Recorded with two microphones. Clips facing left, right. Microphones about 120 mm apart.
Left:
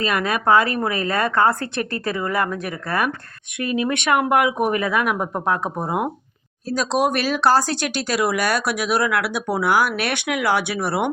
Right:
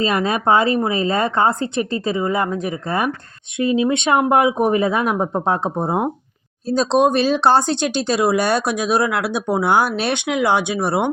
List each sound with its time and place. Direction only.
0.0 s speech: 25° right (ahead or behind)